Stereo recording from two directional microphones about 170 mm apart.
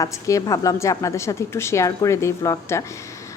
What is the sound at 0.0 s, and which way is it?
A woman's voice, 20° left (ahead or behind).